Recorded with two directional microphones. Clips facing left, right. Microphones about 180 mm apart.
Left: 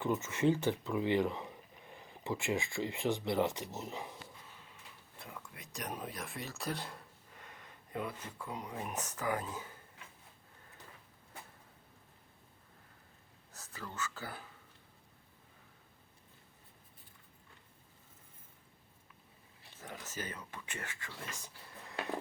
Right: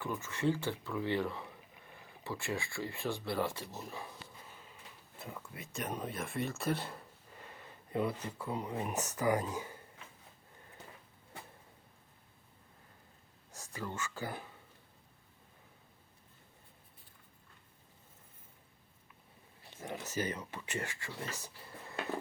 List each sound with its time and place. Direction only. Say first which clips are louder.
0.0 s speech: left 3 dB; 20° left (ahead or behind)
5.2 s speech: right 4 dB; 5° right (ahead or behind)
13.9 s speech: even; 10° right (ahead or behind)
19.8 s speech: right 7 dB; 10° right (ahead or behind)
21.3 s a sound: right 3 dB; 10° right (ahead or behind)